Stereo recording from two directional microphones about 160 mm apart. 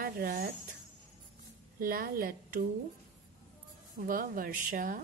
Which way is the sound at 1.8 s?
60° right (ahead or behind).